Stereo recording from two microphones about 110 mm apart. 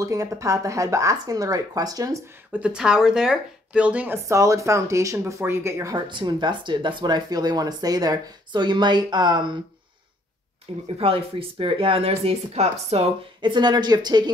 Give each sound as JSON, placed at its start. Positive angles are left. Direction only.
{"t": 0.0, "sound": "speech", "side_deg": -30}
{"t": 2.5, "sound": "speech", "side_deg": -10}
{"t": 4.3, "sound": "speech", "side_deg": -30}
{"t": 6.0, "sound": "speech", "side_deg": -45}
{"t": 11.0, "sound": "speech", "side_deg": -55}
{"t": 13.4, "sound": "speech", "side_deg": -45}